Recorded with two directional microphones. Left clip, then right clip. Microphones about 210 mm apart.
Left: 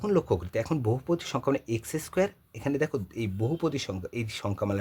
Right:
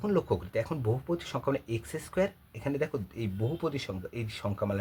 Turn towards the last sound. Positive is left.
turn(degrees=40)  # may be behind; listen again after turning